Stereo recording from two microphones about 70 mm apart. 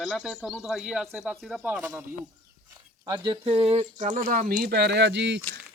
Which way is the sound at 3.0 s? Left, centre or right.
Right.